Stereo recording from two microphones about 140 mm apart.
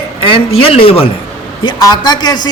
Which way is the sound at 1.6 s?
30° left (ahead or behind).